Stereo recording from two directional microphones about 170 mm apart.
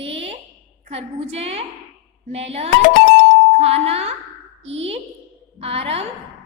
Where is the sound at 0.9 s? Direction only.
35° right (ahead or behind).